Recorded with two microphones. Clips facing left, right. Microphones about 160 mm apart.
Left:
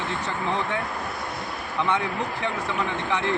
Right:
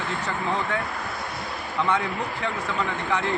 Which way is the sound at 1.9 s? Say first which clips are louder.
Even; 20° left (ahead or behind).